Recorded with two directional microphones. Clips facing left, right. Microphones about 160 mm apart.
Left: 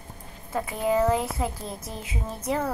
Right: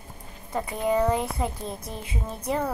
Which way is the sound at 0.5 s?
5° left (ahead or behind).